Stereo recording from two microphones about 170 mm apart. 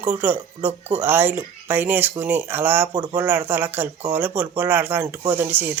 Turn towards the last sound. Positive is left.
turn(degrees=-10)  # may be behind; listen again after turning